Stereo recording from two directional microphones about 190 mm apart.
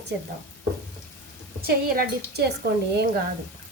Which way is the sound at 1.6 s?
55° right (ahead or behind).